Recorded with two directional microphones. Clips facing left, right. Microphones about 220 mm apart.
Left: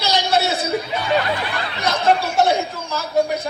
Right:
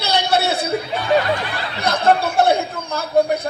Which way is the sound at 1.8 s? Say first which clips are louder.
Right 2 dB; 55° right (ahead or behind).